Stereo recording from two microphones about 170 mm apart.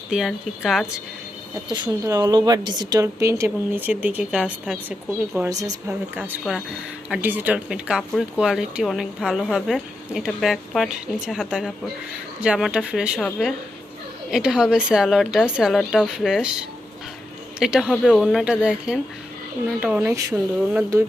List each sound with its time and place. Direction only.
0.1 s speech: centre (ahead or behind)
1.7 s speech: 25° right (ahead or behind); by 5.5 s 5° right (ahead or behind)
5.5 s speech: 20° right (ahead or behind)
6.5 s speech: 5° right (ahead or behind)
17.6 s speech: 5° right (ahead or behind)